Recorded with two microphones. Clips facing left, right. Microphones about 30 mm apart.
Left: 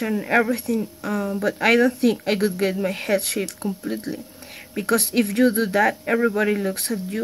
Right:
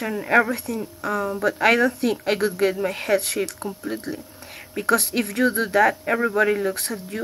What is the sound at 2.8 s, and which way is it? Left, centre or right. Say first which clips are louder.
Speech: even; centre.